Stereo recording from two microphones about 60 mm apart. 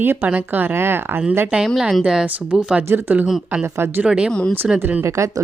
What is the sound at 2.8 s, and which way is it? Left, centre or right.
A woman's voice, right.